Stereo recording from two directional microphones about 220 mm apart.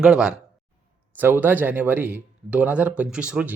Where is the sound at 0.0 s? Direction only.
5° right (ahead or behind).